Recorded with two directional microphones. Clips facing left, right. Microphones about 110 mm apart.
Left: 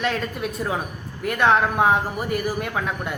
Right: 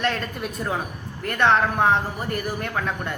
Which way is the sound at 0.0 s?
5° left (ahead or behind).